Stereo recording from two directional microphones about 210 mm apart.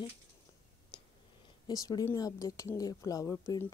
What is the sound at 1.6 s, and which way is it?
A woman's voice, 20° left (ahead or behind).